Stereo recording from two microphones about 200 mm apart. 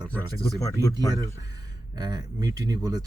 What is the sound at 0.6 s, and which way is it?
Speech, 15° left (ahead or behind).